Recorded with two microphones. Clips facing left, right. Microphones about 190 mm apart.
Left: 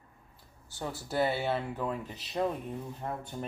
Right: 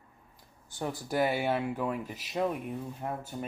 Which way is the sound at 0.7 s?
15° right (ahead or behind).